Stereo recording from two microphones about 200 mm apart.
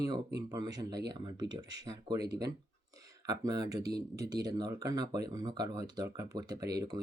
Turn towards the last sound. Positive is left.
turn(degrees=-20)  # may be behind; listen again after turning